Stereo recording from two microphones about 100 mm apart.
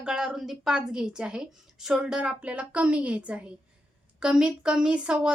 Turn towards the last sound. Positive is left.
turn(degrees=-10)  # may be behind; listen again after turning